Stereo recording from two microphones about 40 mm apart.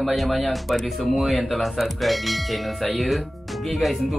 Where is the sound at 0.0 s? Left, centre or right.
Centre.